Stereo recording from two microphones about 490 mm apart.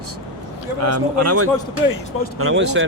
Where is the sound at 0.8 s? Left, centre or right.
Right.